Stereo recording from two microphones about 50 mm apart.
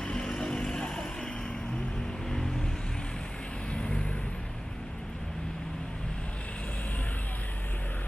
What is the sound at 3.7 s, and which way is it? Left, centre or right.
Vehicle, left.